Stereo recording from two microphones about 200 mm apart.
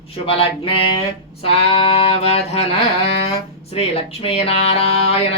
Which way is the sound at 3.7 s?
30° left (ahead or behind).